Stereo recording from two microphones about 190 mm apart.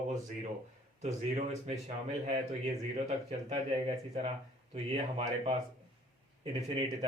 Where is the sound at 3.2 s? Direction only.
35° right (ahead or behind).